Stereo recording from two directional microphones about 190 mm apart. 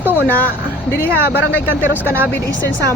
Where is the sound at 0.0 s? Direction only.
10° right (ahead or behind).